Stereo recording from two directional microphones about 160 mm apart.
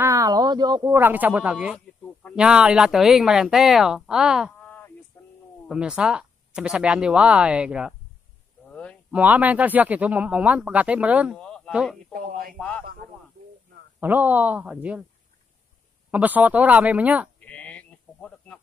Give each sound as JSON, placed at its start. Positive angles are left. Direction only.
{"t": 0.0, "sound": "speech", "side_deg": -20}
{"t": 5.7, "sound": "speech", "side_deg": -5}
{"t": 9.1, "sound": "speech", "side_deg": -10}
{"t": 11.3, "sound": "a sound", "side_deg": 5}
{"t": 11.7, "sound": "speech", "side_deg": -5}
{"t": 12.1, "sound": "speech", "side_deg": -65}
{"t": 12.5, "sound": "a man's voice", "side_deg": 5}
{"t": 13.9, "sound": "speech", "side_deg": -10}
{"t": 16.1, "sound": "speech", "side_deg": -10}
{"t": 17.4, "sound": "a sound", "side_deg": 10}